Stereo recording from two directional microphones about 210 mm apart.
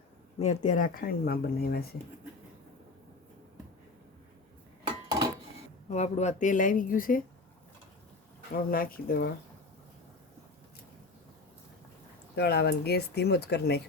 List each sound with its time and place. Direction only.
0.3 s speech: 35° left (ahead or behind)
5.9 s speech: 35° left (ahead or behind)
8.7 s speech: 45° left (ahead or behind)
12.4 s speech: 50° left (ahead or behind)